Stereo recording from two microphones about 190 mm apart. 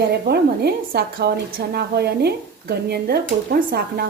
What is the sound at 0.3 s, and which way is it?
A woman's voice, 60° right (ahead or behind).